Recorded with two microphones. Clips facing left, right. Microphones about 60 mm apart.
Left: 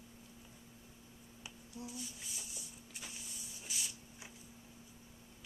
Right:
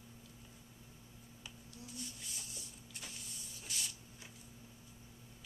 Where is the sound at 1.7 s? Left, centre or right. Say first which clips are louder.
Left 7 dB; centre.